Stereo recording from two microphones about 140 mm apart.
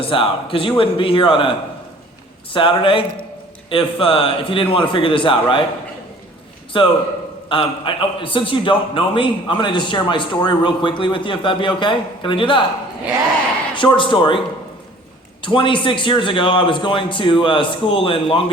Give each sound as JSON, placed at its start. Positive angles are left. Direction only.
{"t": 0.0, "sound": "a man's voice", "side_deg": 40}
{"t": 6.7, "sound": "a man's voice", "side_deg": 35}
{"t": 13.7, "sound": "a man's voice", "side_deg": 35}